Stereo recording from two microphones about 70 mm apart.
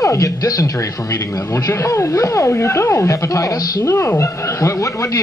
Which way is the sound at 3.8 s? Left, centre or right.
Left.